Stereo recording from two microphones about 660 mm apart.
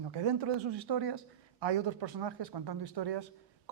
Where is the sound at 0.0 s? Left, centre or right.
Right.